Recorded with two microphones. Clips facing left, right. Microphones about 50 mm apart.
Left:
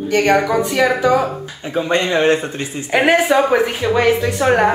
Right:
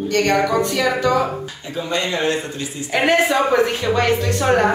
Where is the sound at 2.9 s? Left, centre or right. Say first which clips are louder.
Left 3 dB; centre.